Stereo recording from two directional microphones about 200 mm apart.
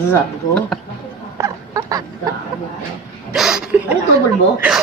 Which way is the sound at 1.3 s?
15° right (ahead or behind).